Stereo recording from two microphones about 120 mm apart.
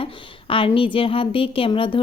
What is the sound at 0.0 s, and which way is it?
A woman's voice, 50° left (ahead or behind).